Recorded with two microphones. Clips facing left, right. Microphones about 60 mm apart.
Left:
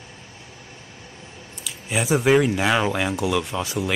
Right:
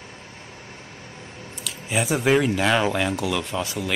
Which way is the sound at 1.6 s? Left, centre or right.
Centre.